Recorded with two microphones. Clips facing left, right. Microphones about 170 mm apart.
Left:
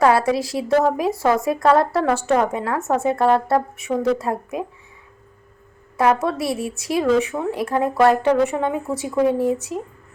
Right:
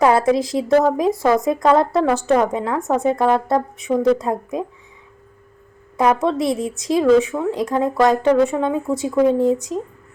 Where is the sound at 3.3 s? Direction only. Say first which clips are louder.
Left 3 dB; 15° right (ahead or behind).